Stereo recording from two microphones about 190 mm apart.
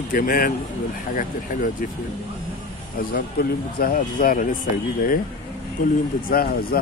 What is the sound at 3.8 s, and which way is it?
Speech, 45° left (ahead or behind).